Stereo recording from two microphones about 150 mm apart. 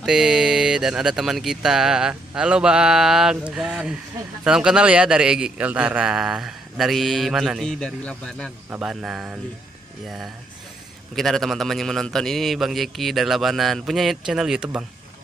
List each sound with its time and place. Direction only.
0.0 s a man's voice: 5° right (ahead or behind)
8.6 s a man's voice: 5° right (ahead or behind)